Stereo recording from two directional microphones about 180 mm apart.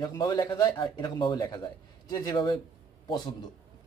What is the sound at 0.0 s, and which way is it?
A man's voice, 20° left (ahead or behind).